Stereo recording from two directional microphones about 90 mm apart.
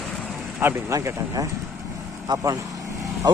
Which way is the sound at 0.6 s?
25° right (ahead or behind).